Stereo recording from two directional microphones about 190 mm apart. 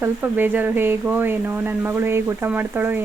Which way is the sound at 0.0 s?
10° right (ahead or behind).